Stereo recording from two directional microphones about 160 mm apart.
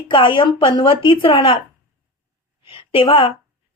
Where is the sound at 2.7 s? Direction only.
35° left (ahead or behind).